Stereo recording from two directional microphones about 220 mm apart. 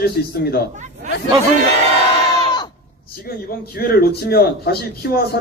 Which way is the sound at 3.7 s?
45° left (ahead or behind).